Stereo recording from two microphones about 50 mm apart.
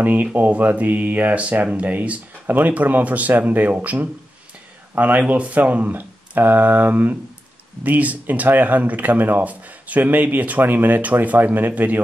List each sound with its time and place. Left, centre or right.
0.0 s speech: right